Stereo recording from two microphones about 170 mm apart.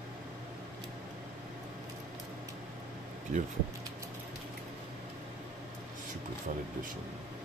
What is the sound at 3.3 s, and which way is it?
Speech, 40° right (ahead or behind).